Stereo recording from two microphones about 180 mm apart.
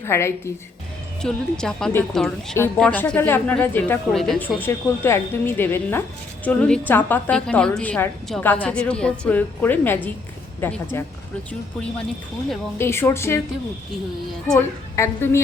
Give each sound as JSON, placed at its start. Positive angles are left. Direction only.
{"t": 0.0, "sound": "a woman's voice", "side_deg": 15}
{"t": 1.2, "sound": "a woman's voice", "side_deg": 5}
{"t": 12.8, "sound": "a woman's voice", "side_deg": 15}
{"t": 14.9, "sound": "a woman's voice", "side_deg": 15}